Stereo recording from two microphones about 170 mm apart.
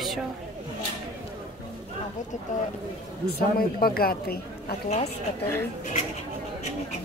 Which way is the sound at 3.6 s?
60° left (ahead or behind).